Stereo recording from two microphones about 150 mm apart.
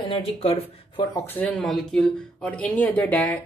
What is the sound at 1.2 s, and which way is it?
Speech, 10° left (ahead or behind).